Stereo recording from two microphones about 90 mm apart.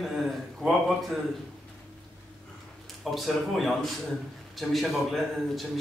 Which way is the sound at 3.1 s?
Centre (ahead or behind).